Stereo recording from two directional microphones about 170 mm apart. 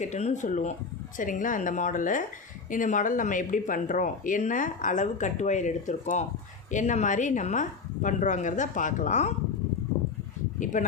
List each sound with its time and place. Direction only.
0.0 s speech: 40° left (ahead or behind)
10.6 s speech: 50° left (ahead or behind)